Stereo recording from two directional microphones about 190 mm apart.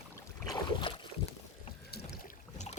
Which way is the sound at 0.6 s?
25° left (ahead or behind).